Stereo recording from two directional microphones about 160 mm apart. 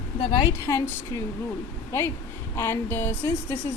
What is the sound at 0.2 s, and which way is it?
Speech, 30° left (ahead or behind).